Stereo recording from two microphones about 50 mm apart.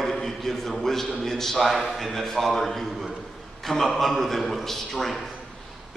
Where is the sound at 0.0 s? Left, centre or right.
Centre.